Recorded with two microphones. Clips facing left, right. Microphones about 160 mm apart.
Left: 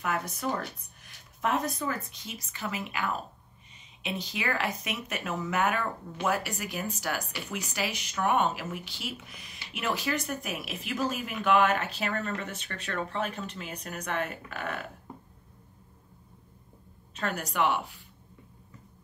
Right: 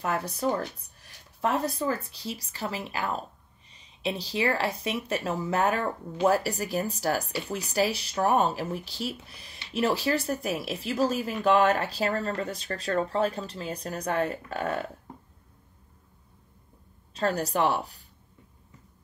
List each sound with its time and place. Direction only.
0.0 s speech: 30° right (ahead or behind)
17.1 s speech: 35° right (ahead or behind)